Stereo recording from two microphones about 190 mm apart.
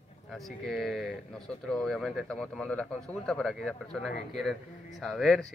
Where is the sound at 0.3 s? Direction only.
Centre (ahead or behind).